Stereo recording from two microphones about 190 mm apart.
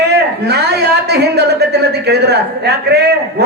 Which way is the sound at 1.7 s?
60° right (ahead or behind).